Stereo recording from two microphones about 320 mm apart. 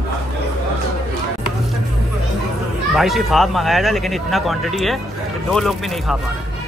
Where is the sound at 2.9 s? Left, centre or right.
Centre.